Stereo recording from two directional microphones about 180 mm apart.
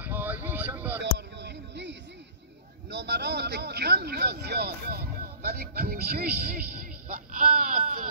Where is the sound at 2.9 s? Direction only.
70° right (ahead or behind).